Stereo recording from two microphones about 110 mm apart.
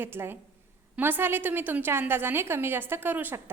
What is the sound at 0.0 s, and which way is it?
A woman's voice, 20° right (ahead or behind).